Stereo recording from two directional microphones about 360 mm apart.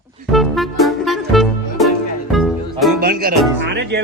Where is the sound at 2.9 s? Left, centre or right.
Right.